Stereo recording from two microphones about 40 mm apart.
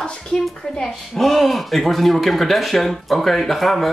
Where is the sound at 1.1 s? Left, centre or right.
Centre.